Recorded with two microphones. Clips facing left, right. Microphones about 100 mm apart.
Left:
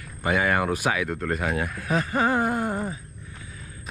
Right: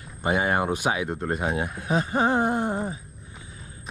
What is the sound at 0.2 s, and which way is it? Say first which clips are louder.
Speech: even; 25° right (ahead or behind).